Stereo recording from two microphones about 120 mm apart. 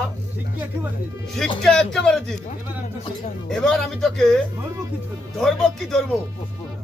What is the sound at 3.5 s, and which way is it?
Speech, 5° left (ahead or behind).